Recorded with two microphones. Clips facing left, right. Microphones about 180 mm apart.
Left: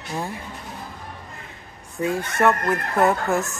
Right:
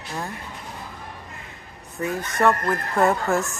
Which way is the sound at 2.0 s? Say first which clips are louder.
Left 2 dB; 15° left (ahead or behind).